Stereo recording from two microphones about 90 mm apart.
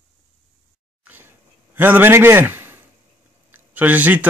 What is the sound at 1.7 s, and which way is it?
A man's voice, 20° right (ahead or behind).